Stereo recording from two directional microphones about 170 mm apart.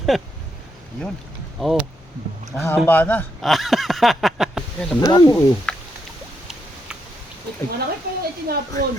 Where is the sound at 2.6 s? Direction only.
10° left (ahead or behind).